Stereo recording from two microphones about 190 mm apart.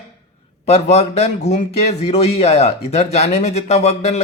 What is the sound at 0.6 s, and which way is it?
Speech, 35° left (ahead or behind).